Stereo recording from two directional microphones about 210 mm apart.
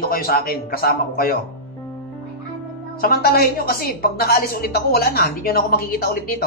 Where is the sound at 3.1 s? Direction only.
45° left (ahead or behind).